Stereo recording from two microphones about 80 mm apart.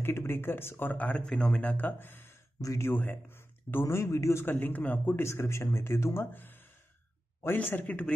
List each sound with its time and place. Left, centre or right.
0.0 s speech: left
2.6 s speech: left
2.9 s speech: left
3.8 s speech: left
6.3 s gasp: left
7.5 s speech: centre